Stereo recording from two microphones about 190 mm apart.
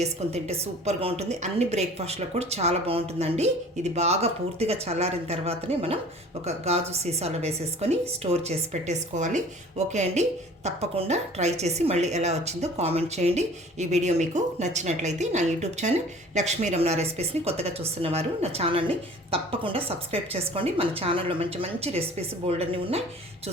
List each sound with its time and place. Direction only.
0.0 s a woman's voice: 35° right (ahead or behind)